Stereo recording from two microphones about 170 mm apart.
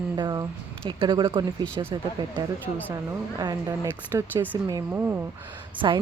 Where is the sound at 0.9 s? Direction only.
30° right (ahead or behind).